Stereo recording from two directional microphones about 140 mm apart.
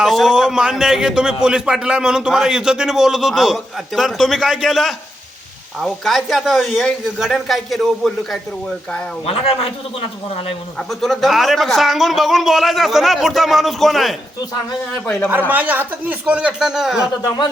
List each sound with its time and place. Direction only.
0.0 s a man's voice: centre (ahead or behind)
9.2 s speech: 45° left (ahead or behind)
10.8 s a man's voice: centre (ahead or behind)
15.0 s a man's voice: 15° left (ahead or behind)
15.3 s speech: 10° right (ahead or behind)